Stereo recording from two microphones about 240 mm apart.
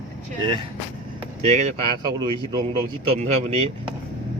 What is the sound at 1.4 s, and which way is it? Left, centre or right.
Speech, right.